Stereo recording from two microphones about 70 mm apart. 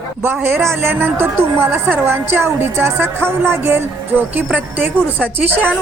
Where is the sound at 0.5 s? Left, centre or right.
Right.